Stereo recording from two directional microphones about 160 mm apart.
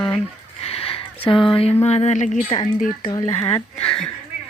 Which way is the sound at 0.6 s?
40° left (ahead or behind).